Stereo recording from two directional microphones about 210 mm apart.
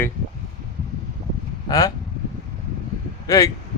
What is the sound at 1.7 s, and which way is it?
Speech, 15° left (ahead or behind).